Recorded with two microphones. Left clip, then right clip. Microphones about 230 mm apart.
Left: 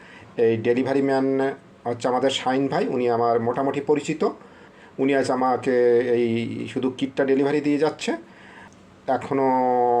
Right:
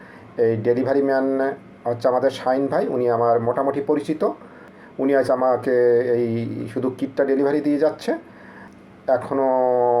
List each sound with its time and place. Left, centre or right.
0.3 s speech: left
3.9 s speech: left
4.9 s speech: left